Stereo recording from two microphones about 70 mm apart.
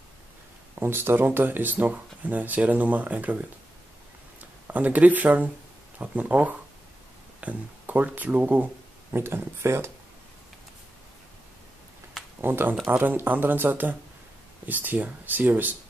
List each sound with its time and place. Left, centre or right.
0.7 s speech: right
9.1 s speech: right
12.4 s speech: right